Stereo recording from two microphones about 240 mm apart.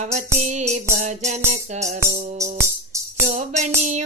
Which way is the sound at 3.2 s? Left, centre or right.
Right.